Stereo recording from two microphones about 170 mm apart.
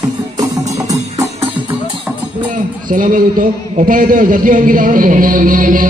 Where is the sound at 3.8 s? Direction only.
55° right (ahead or behind).